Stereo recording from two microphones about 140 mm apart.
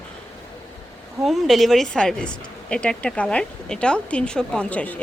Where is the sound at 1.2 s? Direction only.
Centre (ahead or behind).